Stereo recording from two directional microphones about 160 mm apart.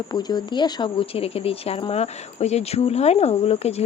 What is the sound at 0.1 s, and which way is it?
Speech, 25° left (ahead or behind).